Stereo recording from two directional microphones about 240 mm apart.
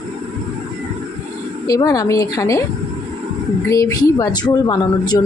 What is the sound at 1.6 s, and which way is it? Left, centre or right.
Speech, centre.